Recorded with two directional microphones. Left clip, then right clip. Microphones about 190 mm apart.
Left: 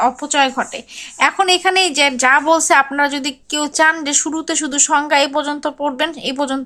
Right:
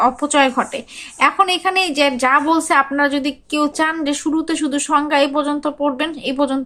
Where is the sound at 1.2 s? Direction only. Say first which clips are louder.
Left 1 dB; 25° left (ahead or behind).